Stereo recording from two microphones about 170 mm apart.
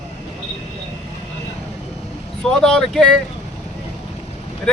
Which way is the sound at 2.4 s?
5° left (ahead or behind).